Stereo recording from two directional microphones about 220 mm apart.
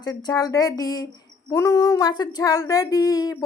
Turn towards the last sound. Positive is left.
turn(degrees=15)  # may be behind; listen again after turning